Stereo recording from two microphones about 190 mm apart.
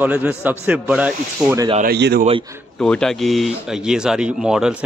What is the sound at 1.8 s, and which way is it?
Speech, 60° right (ahead or behind).